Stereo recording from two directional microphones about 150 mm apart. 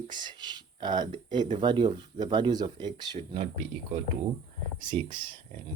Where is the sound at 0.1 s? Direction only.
30° right (ahead or behind).